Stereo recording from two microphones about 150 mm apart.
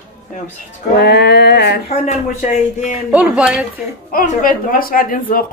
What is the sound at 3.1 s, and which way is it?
Speech, 5° right (ahead or behind).